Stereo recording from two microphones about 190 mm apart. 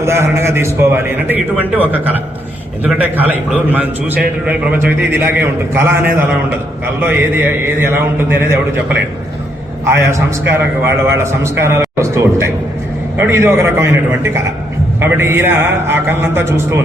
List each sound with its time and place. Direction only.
0.0 s a man's voice: 15° right (ahead or behind)
9.8 s a man's voice: 15° right (ahead or behind)